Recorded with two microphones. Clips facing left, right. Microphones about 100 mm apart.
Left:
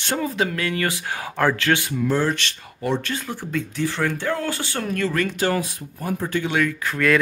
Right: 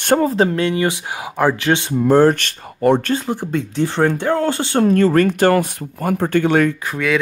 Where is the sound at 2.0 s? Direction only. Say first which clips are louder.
Right 10 dB; 50° right (ahead or behind).